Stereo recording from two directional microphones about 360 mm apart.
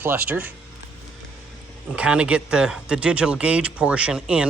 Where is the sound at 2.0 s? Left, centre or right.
Centre.